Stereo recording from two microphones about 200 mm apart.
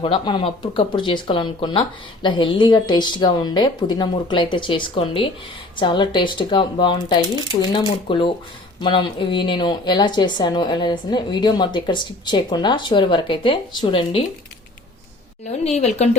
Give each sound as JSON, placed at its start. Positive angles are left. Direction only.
{"t": 0.0, "sound": "a woman's voice", "side_deg": 25}
{"t": 15.4, "sound": "a woman's voice", "side_deg": 35}